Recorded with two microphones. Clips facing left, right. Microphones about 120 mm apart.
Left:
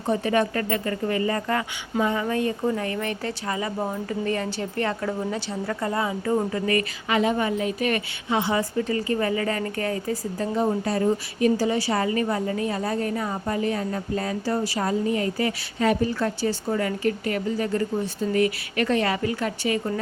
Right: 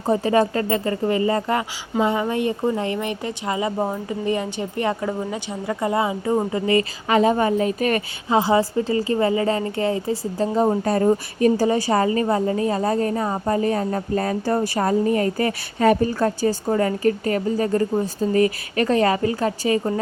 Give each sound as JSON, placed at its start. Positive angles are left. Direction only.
{"t": 0.0, "sound": "speech", "side_deg": -35}
{"t": 7.1, "sound": "a woman's voice", "side_deg": -40}